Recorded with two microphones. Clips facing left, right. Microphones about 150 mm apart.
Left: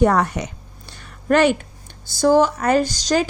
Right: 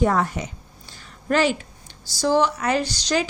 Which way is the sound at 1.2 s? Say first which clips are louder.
Left 5 dB; 60° left (ahead or behind).